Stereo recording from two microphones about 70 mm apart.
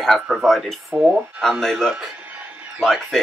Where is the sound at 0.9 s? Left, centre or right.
Right.